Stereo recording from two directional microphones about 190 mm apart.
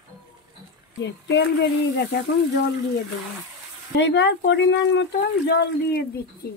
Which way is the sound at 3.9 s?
65° left (ahead or behind).